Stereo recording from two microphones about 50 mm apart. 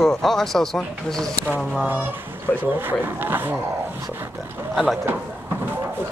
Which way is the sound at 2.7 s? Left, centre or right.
Right.